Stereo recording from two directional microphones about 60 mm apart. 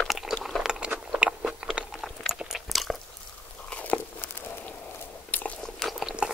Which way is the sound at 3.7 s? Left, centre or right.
Left.